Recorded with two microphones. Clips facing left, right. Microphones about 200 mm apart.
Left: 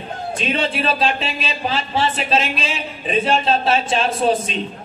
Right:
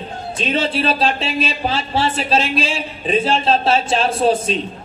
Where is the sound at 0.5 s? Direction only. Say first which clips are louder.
Right 2 dB; 30° right (ahead or behind).